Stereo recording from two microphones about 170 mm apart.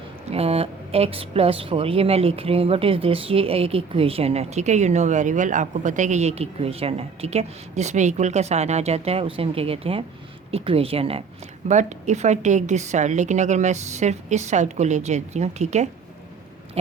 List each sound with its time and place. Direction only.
0.3 s a woman's voice: 35° right (ahead or behind)